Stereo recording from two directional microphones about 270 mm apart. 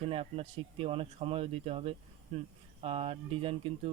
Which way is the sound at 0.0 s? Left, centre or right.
Right.